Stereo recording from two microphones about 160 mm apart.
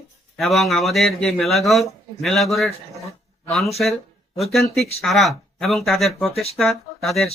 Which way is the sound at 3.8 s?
5° left (ahead or behind).